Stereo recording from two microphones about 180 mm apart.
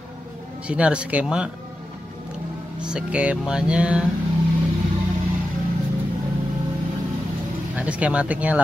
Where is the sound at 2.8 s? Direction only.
5° right (ahead or behind).